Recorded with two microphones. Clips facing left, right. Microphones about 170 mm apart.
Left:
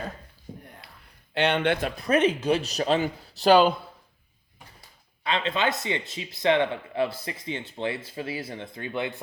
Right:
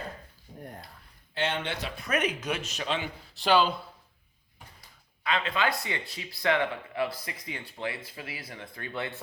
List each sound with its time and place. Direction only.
1.3 s speech: 70° left (ahead or behind)
2.0 s speech: 30° left (ahead or behind); by 3.8 s 45° left (ahead or behind)
5.2 s speech: 25° left (ahead or behind)